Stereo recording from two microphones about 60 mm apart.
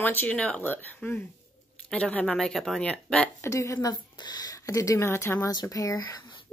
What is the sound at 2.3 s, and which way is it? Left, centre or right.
Speech, centre.